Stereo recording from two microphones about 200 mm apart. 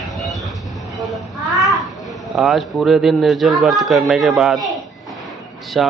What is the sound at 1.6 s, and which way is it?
A child's voice, centre (ahead or behind).